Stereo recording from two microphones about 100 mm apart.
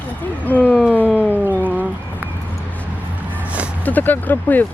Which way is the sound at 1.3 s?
15° right (ahead or behind).